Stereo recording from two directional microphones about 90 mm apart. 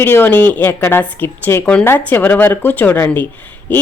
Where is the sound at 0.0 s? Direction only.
25° left (ahead or behind).